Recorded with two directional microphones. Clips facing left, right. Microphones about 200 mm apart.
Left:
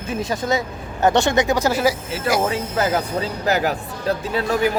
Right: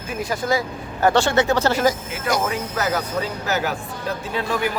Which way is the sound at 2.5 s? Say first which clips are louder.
Left 3 dB; 30° left (ahead or behind).